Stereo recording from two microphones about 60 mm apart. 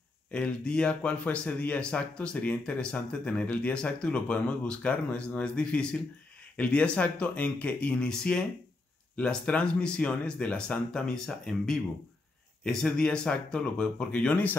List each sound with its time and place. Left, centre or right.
0.3 s speech: centre